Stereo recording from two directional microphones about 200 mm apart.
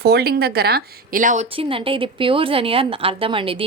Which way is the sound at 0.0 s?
55° right (ahead or behind).